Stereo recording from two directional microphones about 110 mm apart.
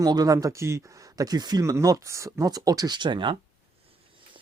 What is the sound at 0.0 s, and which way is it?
Speech, 35° right (ahead or behind).